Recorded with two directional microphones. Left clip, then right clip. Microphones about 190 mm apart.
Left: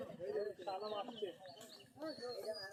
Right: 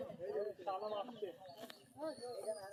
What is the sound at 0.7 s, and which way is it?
Bird, 45° left (ahead or behind).